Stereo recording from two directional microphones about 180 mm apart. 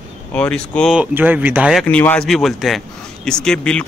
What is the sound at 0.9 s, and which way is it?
Speech, 10° right (ahead or behind).